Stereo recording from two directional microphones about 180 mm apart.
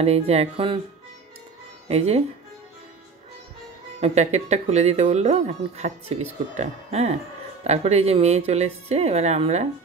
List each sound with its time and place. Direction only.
0.0 s speech: 35° right (ahead or behind)
1.9 s speech: 35° right (ahead or behind)
4.0 s speech: 35° right (ahead or behind)